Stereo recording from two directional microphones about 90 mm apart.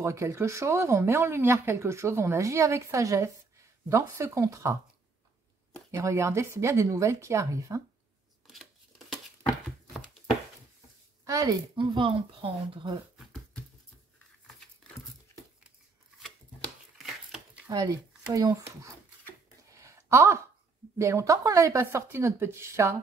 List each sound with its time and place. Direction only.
0.0 s speech: 30° right (ahead or behind)
5.9 s speech: 35° right (ahead or behind)
8.5 s tearing: centre (ahead or behind)
11.2 s speech: 40° right (ahead or behind)
11.7 s speech: 65° right (ahead or behind)
14.8 s dog: 5° left (ahead or behind)
17.6 s a child's voice: 45° right (ahead or behind)
19.7 s a sound: 35° right (ahead or behind)
21.0 s speech: 35° right (ahead or behind)